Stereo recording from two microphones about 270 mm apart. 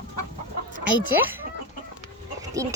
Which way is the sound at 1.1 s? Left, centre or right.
Centre.